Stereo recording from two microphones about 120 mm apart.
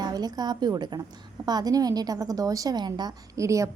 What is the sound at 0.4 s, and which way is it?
Speech, 35° right (ahead or behind).